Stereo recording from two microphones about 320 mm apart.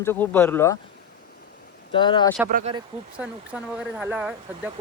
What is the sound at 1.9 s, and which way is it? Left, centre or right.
Speech, centre.